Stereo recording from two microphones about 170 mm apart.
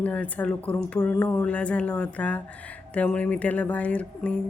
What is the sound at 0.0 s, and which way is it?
Speech, 10° left (ahead or behind).